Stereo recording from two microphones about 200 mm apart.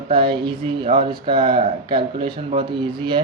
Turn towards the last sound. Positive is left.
turn(degrees=-25)  # may be behind; listen again after turning